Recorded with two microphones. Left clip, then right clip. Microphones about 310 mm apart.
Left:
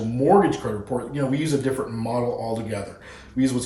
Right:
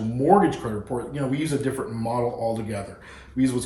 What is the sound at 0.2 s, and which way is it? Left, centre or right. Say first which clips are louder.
Speech: left 1 dB; centre.